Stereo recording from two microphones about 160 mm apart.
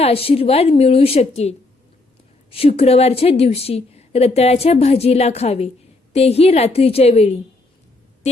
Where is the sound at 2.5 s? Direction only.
35° left (ahead or behind).